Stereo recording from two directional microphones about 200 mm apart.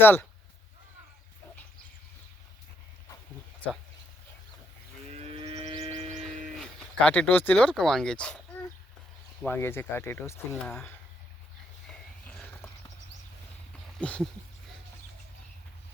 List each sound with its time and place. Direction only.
0.0 s speech: 10° left (ahead or behind)
5.0 s livestock: 30° right (ahead or behind)
6.4 s speech: 5° left (ahead or behind)
9.4 s speech: 10° left (ahead or behind)
14.0 s speech: 5° left (ahead or behind)